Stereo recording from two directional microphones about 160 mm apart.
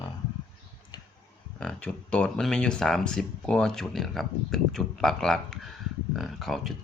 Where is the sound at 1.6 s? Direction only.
5° left (ahead or behind).